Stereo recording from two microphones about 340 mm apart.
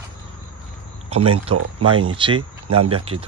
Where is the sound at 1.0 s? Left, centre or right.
Centre.